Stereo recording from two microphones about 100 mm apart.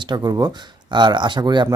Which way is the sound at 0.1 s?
40° right (ahead or behind).